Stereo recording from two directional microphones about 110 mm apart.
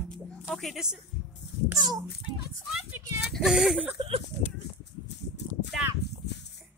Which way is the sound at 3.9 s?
60° right (ahead or behind).